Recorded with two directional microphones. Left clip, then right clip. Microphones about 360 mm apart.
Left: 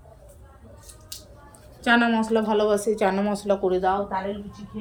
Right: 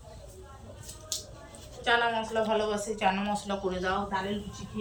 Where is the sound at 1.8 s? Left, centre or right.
Left.